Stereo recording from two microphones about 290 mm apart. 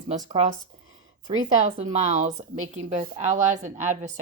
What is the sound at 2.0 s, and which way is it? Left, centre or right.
Speech, right.